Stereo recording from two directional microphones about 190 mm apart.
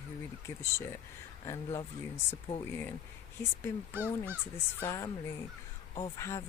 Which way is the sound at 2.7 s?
10° left (ahead or behind).